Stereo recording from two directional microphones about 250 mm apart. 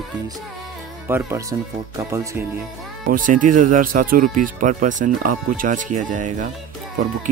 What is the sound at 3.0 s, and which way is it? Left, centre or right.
Speech, right.